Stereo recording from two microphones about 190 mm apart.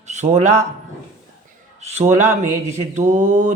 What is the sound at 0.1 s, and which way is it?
Speech, 35° right (ahead or behind).